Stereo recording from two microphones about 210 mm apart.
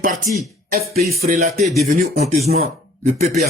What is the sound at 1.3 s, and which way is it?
Speech, 40° right (ahead or behind).